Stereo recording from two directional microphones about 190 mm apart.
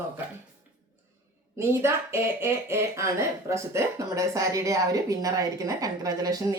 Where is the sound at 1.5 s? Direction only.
15° right (ahead or behind).